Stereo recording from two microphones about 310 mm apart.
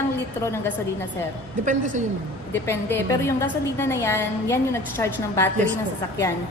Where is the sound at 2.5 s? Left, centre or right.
Centre.